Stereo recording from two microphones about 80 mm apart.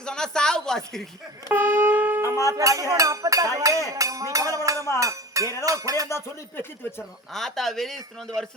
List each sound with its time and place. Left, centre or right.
0.0 s a woman's voice: centre
1.5 s shofar: right
2.2 s a sound: left
2.5 s speech: right
3.8 s a sound: right
5.6 s speech: right
6.1 s speech: left
7.3 s speech: centre